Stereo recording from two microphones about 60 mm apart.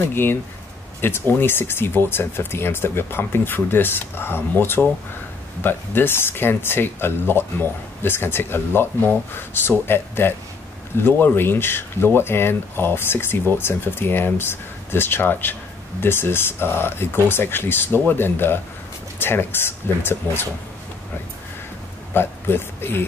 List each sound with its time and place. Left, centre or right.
0.1 s speech: left
22.1 s speech: left